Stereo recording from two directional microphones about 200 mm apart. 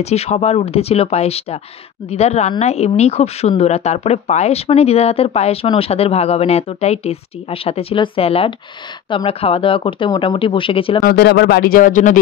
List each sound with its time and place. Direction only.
0.0 s speech: 35° left (ahead or behind)
11.0 s speech: 50° left (ahead or behind)